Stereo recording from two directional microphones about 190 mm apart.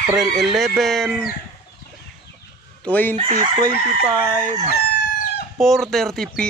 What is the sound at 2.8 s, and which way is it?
Speech, 10° left (ahead or behind).